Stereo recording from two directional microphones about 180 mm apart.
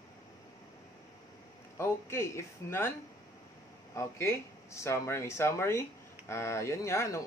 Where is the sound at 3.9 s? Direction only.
15° left (ahead or behind).